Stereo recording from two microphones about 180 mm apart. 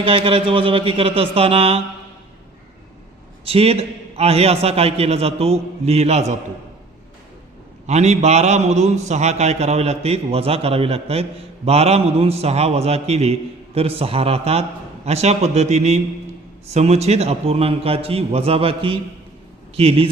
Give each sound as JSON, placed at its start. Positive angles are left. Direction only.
{"t": 0.0, "sound": "a man's voice", "side_deg": -30}
{"t": 3.4, "sound": "a man's voice", "side_deg": -35}
{"t": 7.9, "sound": "a man's voice", "side_deg": -40}